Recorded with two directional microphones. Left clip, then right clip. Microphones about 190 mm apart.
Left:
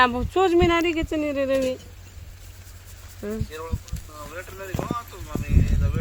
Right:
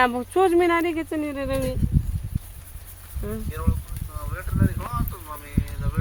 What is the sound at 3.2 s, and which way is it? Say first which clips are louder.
Speech: left 1 dB; 30° left (ahead or behind).